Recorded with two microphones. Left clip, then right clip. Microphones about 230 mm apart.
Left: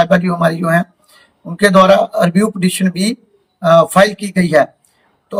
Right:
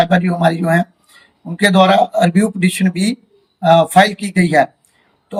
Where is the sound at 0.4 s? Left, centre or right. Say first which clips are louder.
Left 1 dB; centre.